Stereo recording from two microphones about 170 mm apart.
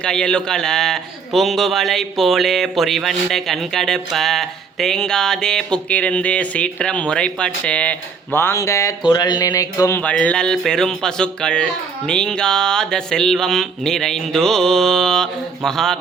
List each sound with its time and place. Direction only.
0.0 s a man's voice: 5° left (ahead or behind)